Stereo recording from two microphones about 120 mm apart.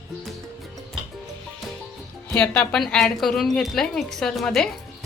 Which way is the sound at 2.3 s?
15° left (ahead or behind).